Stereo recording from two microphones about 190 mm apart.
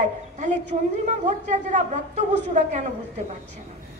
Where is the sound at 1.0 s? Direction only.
40° right (ahead or behind).